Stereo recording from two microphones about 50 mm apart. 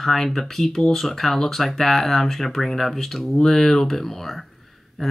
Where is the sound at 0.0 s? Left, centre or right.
Centre.